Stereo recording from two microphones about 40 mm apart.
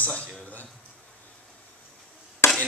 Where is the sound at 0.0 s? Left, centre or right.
Left.